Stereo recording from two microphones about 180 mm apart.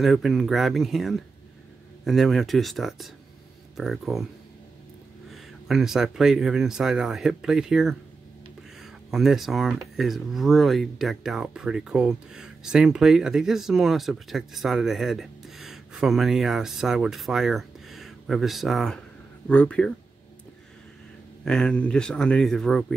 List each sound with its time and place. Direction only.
0.0 s speech: centre (ahead or behind)
5.3 s speech: centre (ahead or behind)
21.5 s speech: 5° left (ahead or behind)